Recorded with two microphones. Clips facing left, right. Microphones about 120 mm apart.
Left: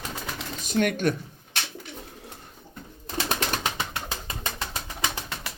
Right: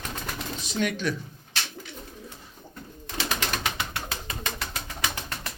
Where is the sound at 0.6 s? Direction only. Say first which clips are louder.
Left 5 dB; 50° left (ahead or behind).